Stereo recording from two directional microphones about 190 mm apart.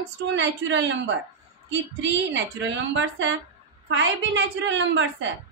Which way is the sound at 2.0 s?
75° right (ahead or behind).